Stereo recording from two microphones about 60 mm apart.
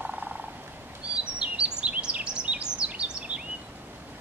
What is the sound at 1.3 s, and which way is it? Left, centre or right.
Bird vocalization, centre.